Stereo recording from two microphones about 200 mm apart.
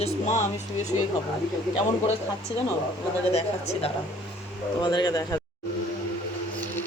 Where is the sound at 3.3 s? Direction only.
30° left (ahead or behind).